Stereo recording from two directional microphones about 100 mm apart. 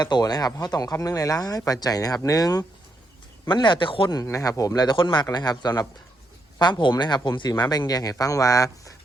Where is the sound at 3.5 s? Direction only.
50° left (ahead or behind).